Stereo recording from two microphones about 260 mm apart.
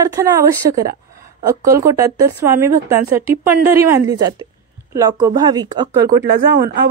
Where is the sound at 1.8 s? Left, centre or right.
Centre.